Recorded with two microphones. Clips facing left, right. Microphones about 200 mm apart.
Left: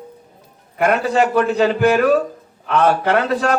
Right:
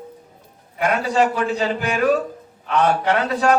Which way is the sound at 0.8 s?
55° left (ahead or behind).